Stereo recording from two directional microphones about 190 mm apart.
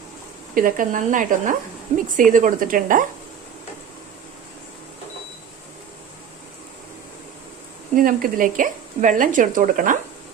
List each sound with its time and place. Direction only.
0.5 s speech: 45° right (ahead or behind)
7.9 s speech: 45° right (ahead or behind)